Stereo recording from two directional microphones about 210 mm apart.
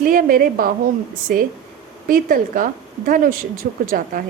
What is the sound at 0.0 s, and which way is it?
Speech, 40° right (ahead or behind).